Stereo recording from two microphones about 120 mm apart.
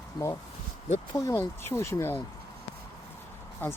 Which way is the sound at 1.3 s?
20° left (ahead or behind).